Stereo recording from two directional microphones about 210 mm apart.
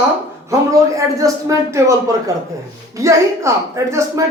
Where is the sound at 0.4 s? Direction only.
15° right (ahead or behind).